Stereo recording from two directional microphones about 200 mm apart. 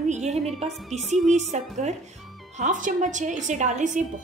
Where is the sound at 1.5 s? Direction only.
35° right (ahead or behind).